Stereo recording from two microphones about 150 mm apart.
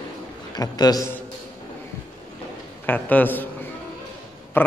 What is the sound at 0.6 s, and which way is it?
Speech, 25° left (ahead or behind).